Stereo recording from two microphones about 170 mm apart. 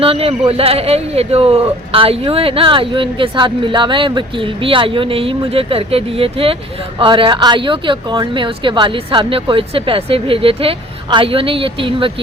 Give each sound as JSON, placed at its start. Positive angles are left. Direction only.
{"t": 0.0, "sound": "speech", "side_deg": -35}